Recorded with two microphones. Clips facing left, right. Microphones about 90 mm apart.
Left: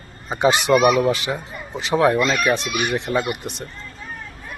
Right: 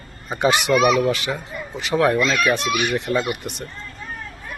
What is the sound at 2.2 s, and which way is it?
Speech, 10° left (ahead or behind).